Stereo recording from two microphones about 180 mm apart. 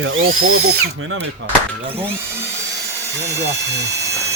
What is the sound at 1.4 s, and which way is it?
Speech, 85° right.